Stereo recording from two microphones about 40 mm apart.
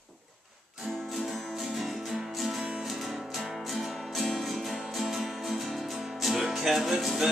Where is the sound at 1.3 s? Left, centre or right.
Centre.